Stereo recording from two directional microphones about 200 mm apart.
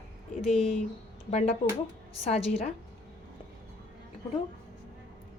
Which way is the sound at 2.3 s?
30° left (ahead or behind).